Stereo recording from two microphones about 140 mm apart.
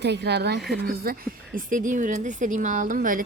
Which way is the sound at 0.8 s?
90° right.